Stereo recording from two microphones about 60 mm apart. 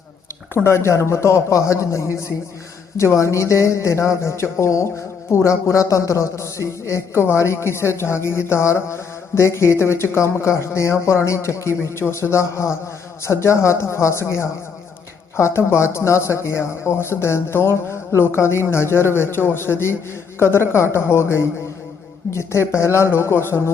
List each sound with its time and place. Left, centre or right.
0.5 s speech: left